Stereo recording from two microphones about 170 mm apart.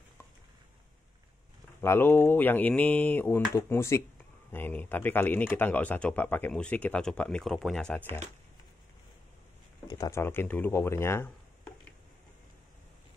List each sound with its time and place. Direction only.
1.8 s speech: 15° left (ahead or behind)
9.8 s speech: 20° left (ahead or behind)